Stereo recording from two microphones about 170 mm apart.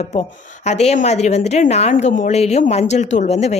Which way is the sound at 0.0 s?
40° left (ahead or behind).